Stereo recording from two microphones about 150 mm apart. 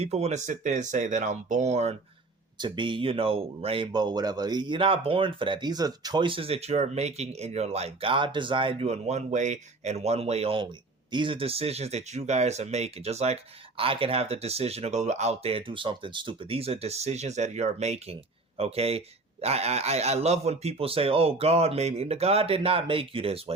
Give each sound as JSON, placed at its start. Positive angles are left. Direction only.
{"t": 0.0, "sound": "speech", "side_deg": -45}
{"t": 2.6, "sound": "speech", "side_deg": -30}